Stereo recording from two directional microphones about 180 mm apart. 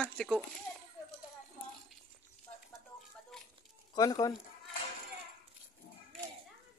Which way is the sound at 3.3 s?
5° left (ahead or behind).